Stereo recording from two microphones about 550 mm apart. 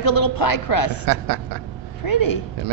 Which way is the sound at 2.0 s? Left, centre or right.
Left.